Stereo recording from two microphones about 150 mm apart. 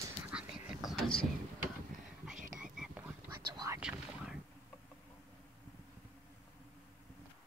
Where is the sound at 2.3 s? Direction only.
60° right (ahead or behind).